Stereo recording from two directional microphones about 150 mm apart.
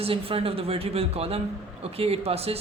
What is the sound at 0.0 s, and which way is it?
A man's voice, 40° right (ahead or behind).